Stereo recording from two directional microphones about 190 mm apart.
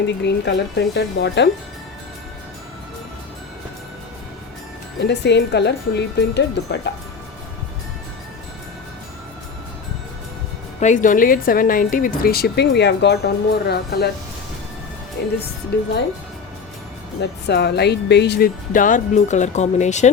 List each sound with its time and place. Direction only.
0.3 s speech: 65° left (ahead or behind)
4.9 s speech: 65° left (ahead or behind)
10.8 s speech: 40° left (ahead or behind); by 14.1 s 60° left (ahead or behind)
15.2 s speech: 60° left (ahead or behind)
17.2 s speech: 60° left (ahead or behind); by 20.1 s 40° left (ahead or behind)